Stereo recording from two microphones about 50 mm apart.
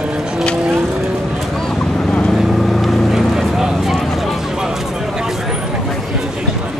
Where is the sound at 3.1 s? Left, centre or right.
Centre.